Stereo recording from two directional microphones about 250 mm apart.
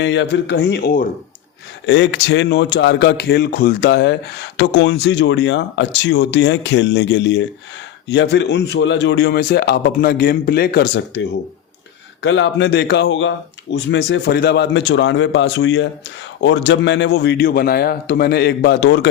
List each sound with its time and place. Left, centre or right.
0.0 s a man's voice: left
12.2 s a man's voice: left